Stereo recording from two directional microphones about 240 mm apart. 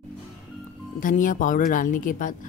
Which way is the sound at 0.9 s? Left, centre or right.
Left.